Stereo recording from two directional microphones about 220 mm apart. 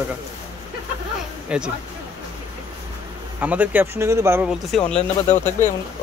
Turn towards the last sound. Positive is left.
turn(degrees=30)  # may be behind; listen again after turning